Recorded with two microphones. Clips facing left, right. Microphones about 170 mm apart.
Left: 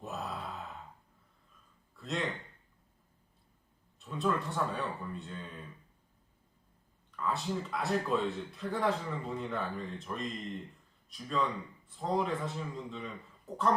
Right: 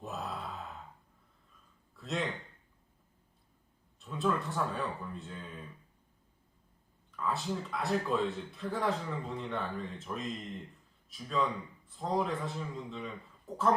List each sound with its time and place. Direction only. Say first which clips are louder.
0.0 s sigh: even; centre (ahead or behind)
2.0 s speech: right 1 dB; centre (ahead or behind)
4.0 s a man's voice: even; centre (ahead or behind)
7.1 s a man's voice: even; centre (ahead or behind)